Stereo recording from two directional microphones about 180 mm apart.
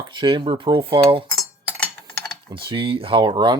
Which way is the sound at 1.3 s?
10° left (ahead or behind).